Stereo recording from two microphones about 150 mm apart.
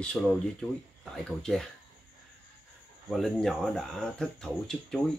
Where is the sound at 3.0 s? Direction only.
Centre (ahead or behind).